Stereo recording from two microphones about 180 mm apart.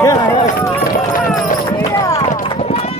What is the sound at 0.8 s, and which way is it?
Run, 50° left (ahead or behind).